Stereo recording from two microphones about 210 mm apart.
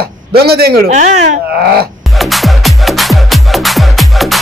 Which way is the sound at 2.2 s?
Centre (ahead or behind).